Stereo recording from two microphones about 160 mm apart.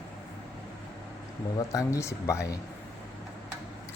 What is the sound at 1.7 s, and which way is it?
Speech, 20° left (ahead or behind).